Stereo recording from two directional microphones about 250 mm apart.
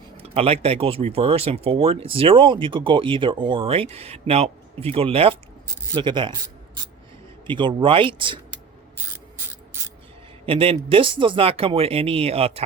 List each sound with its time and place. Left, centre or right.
0.2 s speech: right
7.4 s speech: centre
10.4 s speech: right